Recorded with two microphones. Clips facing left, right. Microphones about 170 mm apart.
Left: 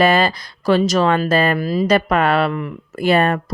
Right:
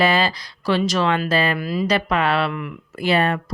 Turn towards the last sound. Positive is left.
turn(degrees=50)  # may be behind; listen again after turning